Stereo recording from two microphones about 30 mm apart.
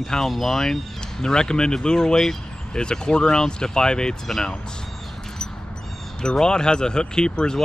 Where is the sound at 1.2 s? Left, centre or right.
Left.